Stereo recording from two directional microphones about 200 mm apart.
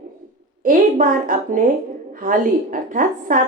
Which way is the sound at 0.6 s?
45° right (ahead or behind).